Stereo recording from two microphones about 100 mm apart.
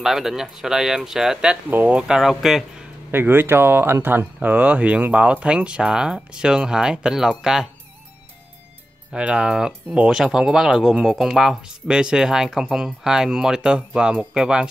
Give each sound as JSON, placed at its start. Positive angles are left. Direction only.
{"t": 0.0, "sound": "speech", "side_deg": 0}
{"t": 1.7, "sound": "speech", "side_deg": -20}
{"t": 2.0, "sound": "speech", "side_deg": -5}
{"t": 3.1, "sound": "speech", "side_deg": -20}
{"t": 9.1, "sound": "speech", "side_deg": -10}